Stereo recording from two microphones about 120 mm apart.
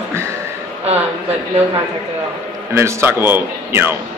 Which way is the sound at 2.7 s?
20° right (ahead or behind).